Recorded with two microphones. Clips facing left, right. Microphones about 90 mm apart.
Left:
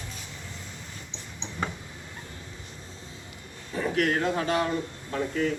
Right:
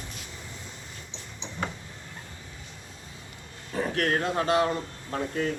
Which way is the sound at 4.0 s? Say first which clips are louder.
Left 1 dB; 45° right (ahead or behind).